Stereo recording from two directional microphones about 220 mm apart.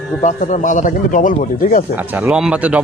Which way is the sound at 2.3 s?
5° right (ahead or behind).